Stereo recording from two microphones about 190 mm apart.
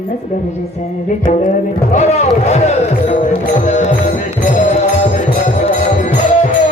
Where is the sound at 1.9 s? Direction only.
35° left (ahead or behind).